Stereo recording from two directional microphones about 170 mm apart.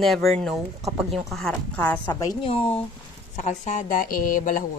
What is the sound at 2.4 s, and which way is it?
Speech, 30° left (ahead or behind).